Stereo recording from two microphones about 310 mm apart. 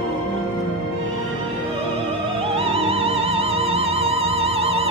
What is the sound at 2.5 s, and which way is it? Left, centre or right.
Music, centre.